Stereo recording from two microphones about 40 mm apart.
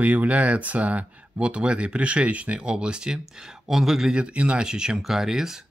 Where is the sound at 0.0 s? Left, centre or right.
Right.